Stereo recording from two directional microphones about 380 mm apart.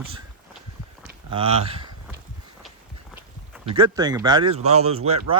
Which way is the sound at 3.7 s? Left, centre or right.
Centre.